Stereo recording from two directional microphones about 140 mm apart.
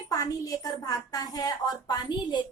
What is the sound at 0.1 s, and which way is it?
A woman's voice, 25° left (ahead or behind).